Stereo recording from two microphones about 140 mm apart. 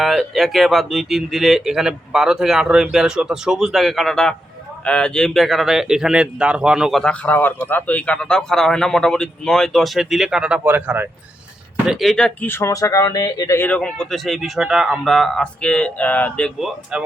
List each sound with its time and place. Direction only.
0.0 s speech: centre (ahead or behind)
7.0 s speech: 10° left (ahead or behind); by 11.1 s 15° right (ahead or behind)
11.9 s speech: centre (ahead or behind); by 13.6 s 25° left (ahead or behind)
13.6 s speech: 10° left (ahead or behind)
16.6 s speech: 5° right (ahead or behind)